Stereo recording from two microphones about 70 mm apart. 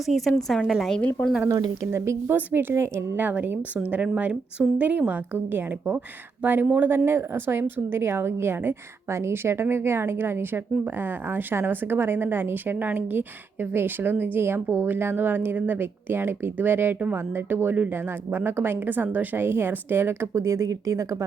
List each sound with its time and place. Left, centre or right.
0.0 s a woman's voice: centre
1.5 s speech: right
1.9 s a woman's voice: right
3.2 s a woman's voice: right
3.8 s a woman's voice: centre; by 20.1 s right
20.3 s speech: right